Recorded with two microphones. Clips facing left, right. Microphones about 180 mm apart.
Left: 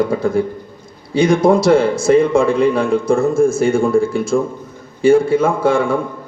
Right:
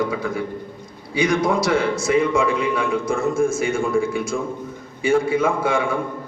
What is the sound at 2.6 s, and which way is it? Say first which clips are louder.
A man's voice: left 7 dB; 30° left (ahead or behind).